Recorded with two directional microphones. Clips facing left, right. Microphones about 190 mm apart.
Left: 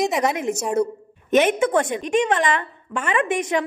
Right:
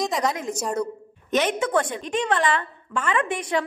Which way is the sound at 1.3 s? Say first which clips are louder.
Left 5 dB; 15° left (ahead or behind).